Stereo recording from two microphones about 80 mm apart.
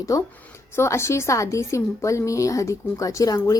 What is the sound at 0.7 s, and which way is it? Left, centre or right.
A woman's voice, left.